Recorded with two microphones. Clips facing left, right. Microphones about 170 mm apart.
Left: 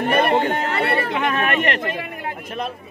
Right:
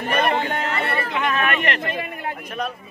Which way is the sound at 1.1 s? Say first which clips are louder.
Left 2 dB; 40° left (ahead or behind).